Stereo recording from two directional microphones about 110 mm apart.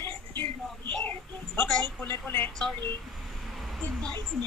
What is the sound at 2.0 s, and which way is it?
Speech, 20° left (ahead or behind).